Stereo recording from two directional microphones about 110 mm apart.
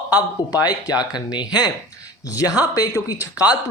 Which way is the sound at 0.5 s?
35° left (ahead or behind).